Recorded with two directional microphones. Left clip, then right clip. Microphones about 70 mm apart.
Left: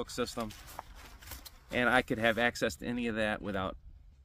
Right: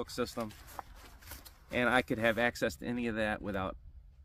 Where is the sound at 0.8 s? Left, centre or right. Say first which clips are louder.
Right 1 dB; left.